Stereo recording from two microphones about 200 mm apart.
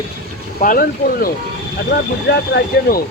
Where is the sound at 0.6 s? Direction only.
45° left (ahead or behind).